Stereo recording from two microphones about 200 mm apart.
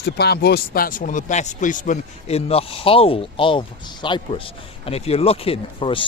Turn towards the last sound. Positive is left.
turn(degrees=25)  # may be behind; listen again after turning